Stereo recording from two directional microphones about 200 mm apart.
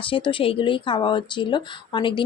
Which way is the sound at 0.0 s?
25° left (ahead or behind).